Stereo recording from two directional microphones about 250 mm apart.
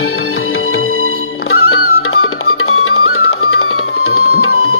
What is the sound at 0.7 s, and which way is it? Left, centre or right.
Music, left.